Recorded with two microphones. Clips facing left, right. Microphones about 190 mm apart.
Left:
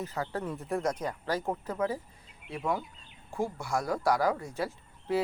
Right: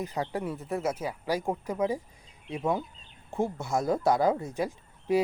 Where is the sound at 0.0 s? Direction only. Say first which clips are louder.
Right 3 dB; 15° right (ahead or behind).